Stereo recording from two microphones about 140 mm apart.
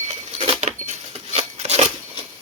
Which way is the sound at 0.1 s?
45° right (ahead or behind).